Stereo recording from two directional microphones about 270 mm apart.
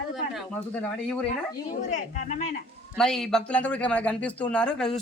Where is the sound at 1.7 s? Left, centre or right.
Left.